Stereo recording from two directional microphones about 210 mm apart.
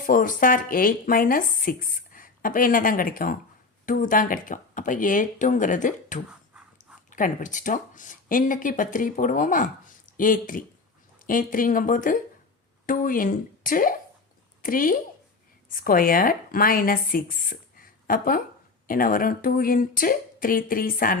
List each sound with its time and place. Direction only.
0.0 s a woman's voice: 40° left (ahead or behind)